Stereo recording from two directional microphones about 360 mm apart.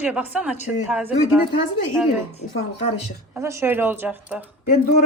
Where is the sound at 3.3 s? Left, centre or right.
Centre.